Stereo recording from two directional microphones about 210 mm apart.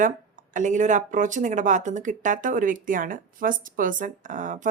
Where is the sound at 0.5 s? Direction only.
35° right (ahead or behind).